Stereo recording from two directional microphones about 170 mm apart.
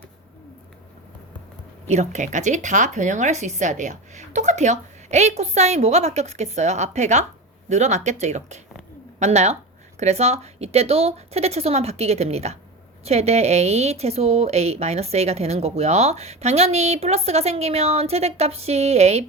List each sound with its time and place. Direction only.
1.9 s a woman's voice: 45° right (ahead or behind)